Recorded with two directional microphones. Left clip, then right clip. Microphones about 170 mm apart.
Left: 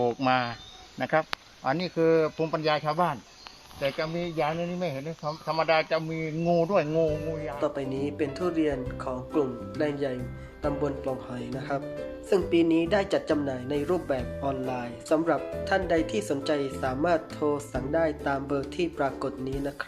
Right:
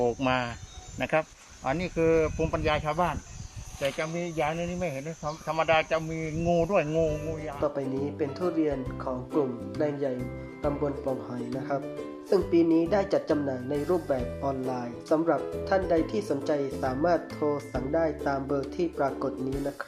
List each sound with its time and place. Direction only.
0.0 s speech: 50° right (ahead or behind)
0.9 s speech: 35° right (ahead or behind)
1.6 s speech: 20° right (ahead or behind)
7.6 s speech: 25° left (ahead or behind)